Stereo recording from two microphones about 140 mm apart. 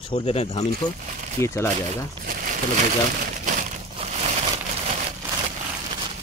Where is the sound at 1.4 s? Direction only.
20° left (ahead or behind).